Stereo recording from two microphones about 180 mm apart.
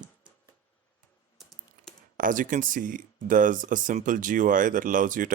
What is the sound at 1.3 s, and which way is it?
Typing, centre (ahead or behind).